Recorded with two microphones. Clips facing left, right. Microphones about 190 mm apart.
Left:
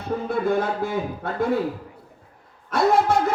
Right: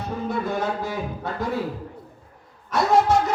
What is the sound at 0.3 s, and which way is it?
Speech, 55° left (ahead or behind).